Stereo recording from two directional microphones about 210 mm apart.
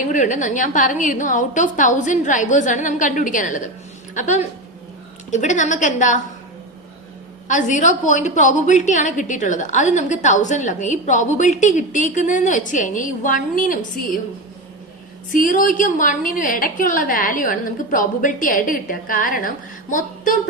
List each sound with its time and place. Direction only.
0.1 s a woman's voice: 35° left (ahead or behind)
7.4 s a woman's voice: 35° left (ahead or behind)
15.3 s a woman's voice: 40° left (ahead or behind)